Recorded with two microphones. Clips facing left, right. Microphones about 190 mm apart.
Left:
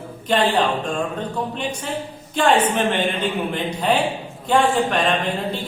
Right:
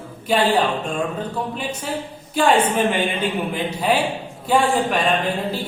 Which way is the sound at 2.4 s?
10° right (ahead or behind).